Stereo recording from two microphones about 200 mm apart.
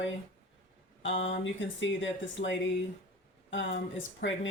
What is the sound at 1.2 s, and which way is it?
Speech, 70° left (ahead or behind).